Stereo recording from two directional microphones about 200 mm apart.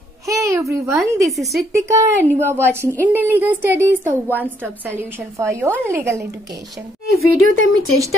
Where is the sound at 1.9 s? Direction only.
10° right (ahead or behind).